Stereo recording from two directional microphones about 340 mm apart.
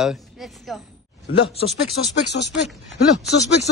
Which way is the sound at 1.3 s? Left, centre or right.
Left.